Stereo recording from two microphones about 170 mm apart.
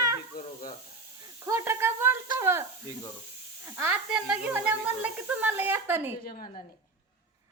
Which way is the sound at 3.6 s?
15° right (ahead or behind).